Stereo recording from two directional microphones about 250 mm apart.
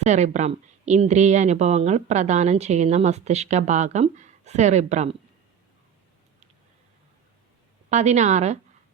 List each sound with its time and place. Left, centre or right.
0.0 s speech: right
7.9 s speech: right